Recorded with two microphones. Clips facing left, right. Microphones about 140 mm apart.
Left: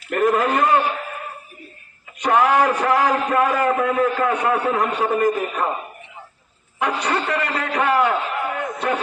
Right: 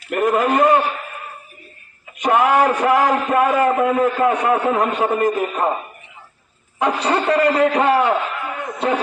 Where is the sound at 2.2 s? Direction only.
25° right (ahead or behind).